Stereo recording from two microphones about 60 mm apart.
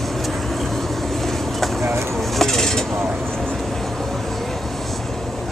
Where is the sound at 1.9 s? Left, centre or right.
Right.